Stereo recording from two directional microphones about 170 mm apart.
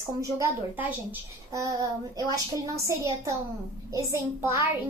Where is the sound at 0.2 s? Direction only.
15° right (ahead or behind).